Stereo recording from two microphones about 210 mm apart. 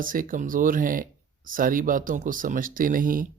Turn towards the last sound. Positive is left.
turn(degrees=-40)  # may be behind; listen again after turning